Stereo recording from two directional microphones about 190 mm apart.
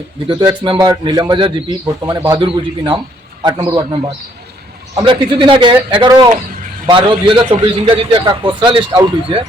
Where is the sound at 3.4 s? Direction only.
25° right (ahead or behind).